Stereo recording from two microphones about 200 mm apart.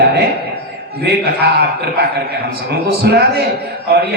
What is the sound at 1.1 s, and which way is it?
Speech, 55° right (ahead or behind).